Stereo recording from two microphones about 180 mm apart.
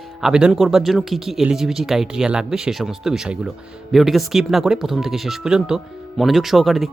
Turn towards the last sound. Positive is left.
turn(degrees=0)  # may be behind; listen again after turning